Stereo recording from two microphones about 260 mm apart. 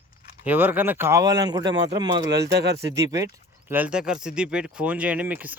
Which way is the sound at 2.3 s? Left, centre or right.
Right.